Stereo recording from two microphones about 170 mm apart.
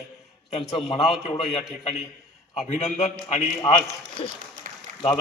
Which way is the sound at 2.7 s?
40° left (ahead or behind).